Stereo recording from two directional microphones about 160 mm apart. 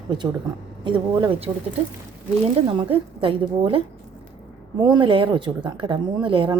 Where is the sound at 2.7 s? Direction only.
35° right (ahead or behind).